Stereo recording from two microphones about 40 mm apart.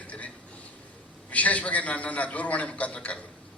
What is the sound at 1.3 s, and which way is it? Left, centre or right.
A man's voice, left.